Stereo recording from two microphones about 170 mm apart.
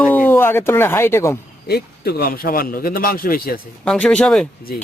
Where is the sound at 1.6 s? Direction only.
65° left (ahead or behind).